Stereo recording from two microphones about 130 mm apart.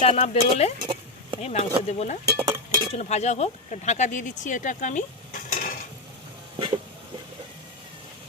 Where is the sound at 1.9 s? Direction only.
60° left (ahead or behind); by 5.8 s 90° left.